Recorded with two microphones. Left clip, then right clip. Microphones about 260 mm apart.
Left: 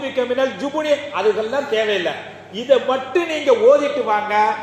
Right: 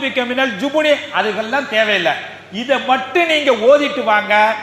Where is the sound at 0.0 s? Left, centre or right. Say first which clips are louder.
Right 2 dB; right.